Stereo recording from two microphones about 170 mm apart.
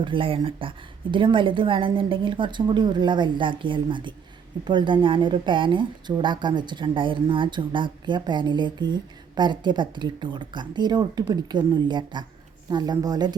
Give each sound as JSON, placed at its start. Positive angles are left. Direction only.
{"t": 0.0, "sound": "a woman's voice", "side_deg": -30}